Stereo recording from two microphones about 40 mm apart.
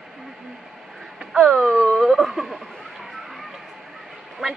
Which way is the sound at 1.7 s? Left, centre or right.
Centre.